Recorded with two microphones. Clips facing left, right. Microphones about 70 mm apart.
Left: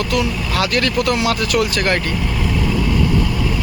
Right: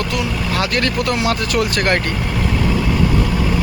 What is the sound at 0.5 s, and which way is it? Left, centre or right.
Speech, right.